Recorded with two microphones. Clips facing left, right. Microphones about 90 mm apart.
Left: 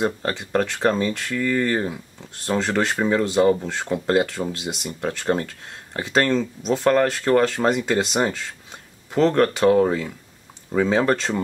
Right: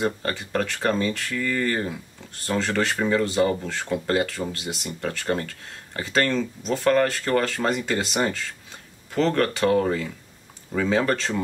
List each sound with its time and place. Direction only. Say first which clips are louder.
0.0 s speech: left 2 dB; 10° left (ahead or behind)
4.1 s speech: left 5 dB; 10° left (ahead or behind)